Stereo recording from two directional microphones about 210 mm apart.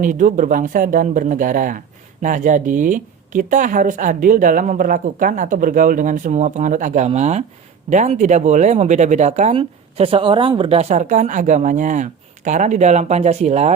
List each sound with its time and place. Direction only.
0.0 s speech: 40° right (ahead or behind)